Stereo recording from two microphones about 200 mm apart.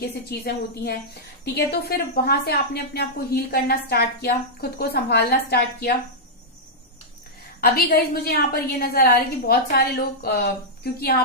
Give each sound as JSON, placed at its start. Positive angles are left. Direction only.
{"t": 0.0, "sound": "a woman's voice", "side_deg": 55}
{"t": 7.6, "sound": "a woman's voice", "side_deg": 50}